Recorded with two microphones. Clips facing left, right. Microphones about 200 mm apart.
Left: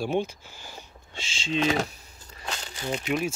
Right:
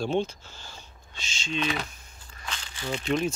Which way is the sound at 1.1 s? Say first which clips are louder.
Left 4 dB; 30° left (ahead or behind).